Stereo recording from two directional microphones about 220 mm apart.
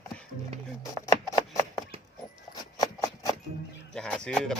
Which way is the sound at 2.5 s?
15° left (ahead or behind).